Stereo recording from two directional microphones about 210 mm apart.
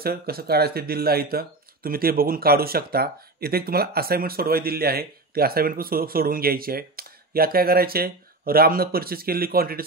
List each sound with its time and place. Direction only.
0.0 s speech: 45° right (ahead or behind)